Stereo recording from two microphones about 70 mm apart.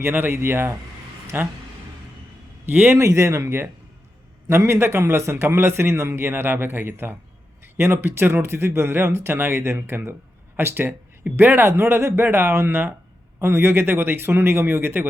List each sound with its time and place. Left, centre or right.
0.0 s a man's voice: right
2.6 s a man's voice: right
3.0 s a man's voice: right